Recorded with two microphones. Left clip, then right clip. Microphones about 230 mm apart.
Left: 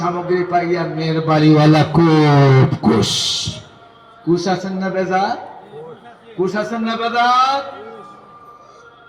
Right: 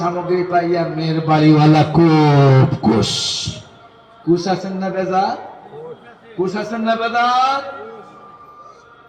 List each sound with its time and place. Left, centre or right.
0.0 s a man's voice: left
4.3 s a man's voice: left
6.4 s a man's voice: left